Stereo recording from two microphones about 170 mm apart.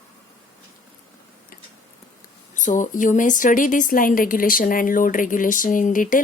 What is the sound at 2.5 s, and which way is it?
A woman's voice, 50° left (ahead or behind).